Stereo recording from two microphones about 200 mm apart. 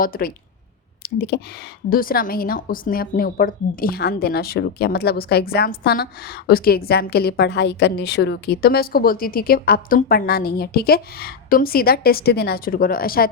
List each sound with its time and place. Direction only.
0.0 s a woman's voice: 45° left (ahead or behind)